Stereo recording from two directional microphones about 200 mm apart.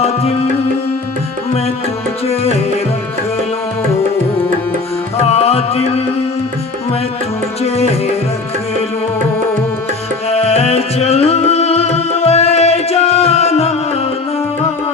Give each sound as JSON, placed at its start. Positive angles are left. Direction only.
{"t": 0.0, "sound": "music", "side_deg": 30}
{"t": 2.2, "sound": "tabla", "side_deg": 30}
{"t": 5.3, "sound": "music", "side_deg": 30}
{"t": 7.6, "sound": "music", "side_deg": 30}
{"t": 10.2, "sound": "music", "side_deg": 30}